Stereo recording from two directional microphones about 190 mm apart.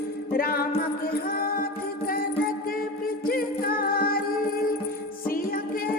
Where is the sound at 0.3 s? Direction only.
50° left (ahead or behind).